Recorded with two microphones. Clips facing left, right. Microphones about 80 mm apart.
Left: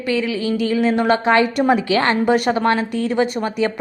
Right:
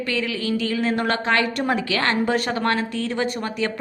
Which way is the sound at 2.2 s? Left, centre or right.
Centre.